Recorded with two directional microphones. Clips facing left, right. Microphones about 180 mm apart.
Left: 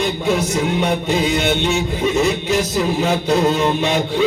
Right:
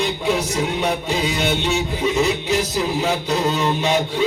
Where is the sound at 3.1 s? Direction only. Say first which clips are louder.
Left 4 dB; 50° left (ahead or behind).